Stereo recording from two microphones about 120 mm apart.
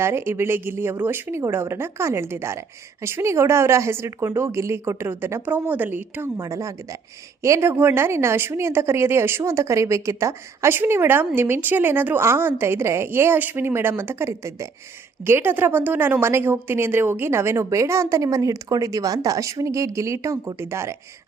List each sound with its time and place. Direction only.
0.0 s speech: 20° right (ahead or behind)